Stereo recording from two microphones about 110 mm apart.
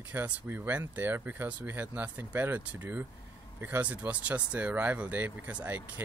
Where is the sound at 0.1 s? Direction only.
20° right (ahead or behind).